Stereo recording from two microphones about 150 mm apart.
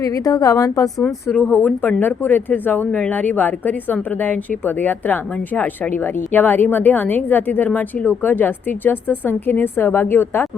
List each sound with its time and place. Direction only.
0.0 s a woman's voice: 25° left (ahead or behind)
0.9 s speech: centre (ahead or behind)
1.4 s a woman's voice: 10° left (ahead or behind)